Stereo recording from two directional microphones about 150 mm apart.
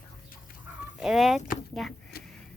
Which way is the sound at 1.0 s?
Centre (ahead or behind).